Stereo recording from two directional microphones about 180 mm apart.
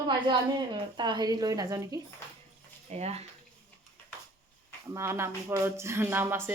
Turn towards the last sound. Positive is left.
turn(degrees=-10)  # may be behind; listen again after turning